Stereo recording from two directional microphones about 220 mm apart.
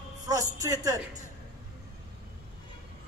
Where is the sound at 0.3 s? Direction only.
15° right (ahead or behind).